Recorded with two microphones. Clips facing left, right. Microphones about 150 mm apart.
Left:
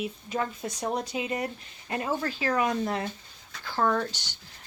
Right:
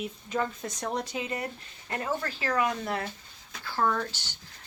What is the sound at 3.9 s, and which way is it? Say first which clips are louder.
Speech: left 3 dB; 35° left (ahead or behind).